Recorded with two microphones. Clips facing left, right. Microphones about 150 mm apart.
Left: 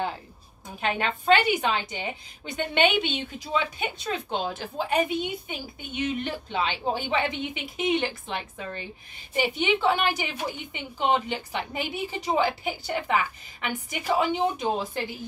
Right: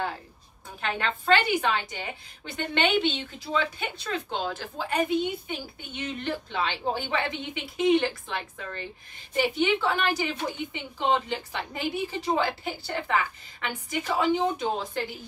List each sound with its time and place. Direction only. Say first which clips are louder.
0.7 s a woman's voice: left 2 dB; 15° left (ahead or behind)